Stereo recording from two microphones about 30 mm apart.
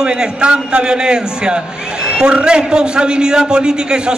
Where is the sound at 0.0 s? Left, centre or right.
Right.